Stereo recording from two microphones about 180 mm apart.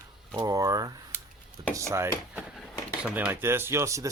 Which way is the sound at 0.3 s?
20° right (ahead or behind).